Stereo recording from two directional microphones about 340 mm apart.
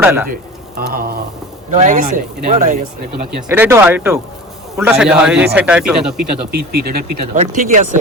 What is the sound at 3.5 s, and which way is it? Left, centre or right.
Speech, centre.